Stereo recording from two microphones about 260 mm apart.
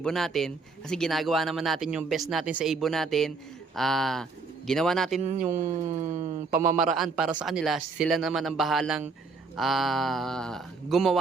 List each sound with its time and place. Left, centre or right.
0.0 s speech: centre
5.2 s speech: right
6.7 s speech: centre